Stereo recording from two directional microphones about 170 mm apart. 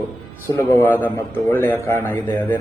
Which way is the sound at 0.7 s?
10° left (ahead or behind).